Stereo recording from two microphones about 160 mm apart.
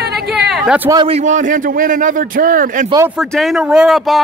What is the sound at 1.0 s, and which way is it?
A man's voice, 45° right (ahead or behind).